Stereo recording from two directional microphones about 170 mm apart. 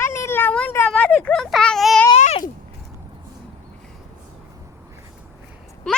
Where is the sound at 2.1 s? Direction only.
40° left (ahead or behind).